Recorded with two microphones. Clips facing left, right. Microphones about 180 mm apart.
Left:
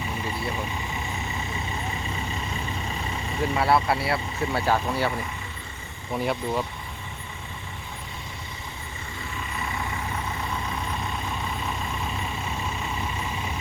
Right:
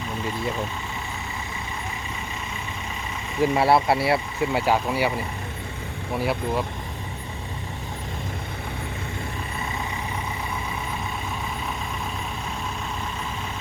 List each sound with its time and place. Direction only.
3.5 s speech: 25° right (ahead or behind)
4.5 s speech: 10° right (ahead or behind)
6.1 s speech: 5° right (ahead or behind)